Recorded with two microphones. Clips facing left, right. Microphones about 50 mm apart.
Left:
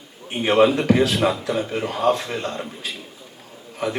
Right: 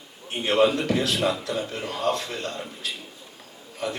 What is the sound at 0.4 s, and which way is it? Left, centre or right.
A man's voice, centre.